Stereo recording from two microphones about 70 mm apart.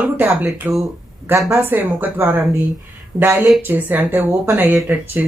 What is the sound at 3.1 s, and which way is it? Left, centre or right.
Speech, right.